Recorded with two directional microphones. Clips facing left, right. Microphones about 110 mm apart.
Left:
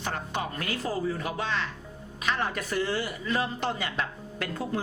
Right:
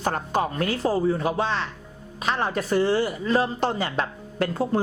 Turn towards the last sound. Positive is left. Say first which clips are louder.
# right 8 dB
turn(degrees=-35)  # may be behind; listen again after turning